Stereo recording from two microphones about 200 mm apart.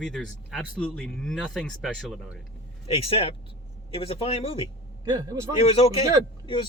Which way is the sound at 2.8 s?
30° left (ahead or behind).